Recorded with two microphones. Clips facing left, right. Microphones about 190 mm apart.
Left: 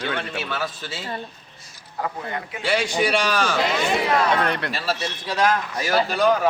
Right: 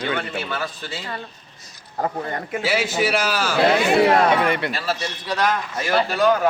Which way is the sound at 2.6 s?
5° right (ahead or behind).